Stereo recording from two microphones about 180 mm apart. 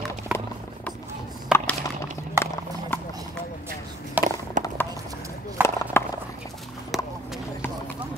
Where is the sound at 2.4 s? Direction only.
15° right (ahead or behind).